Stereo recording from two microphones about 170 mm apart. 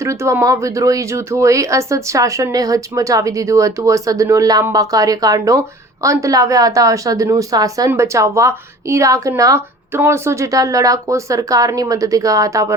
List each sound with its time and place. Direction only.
0.0 s speech: 15° right (ahead or behind)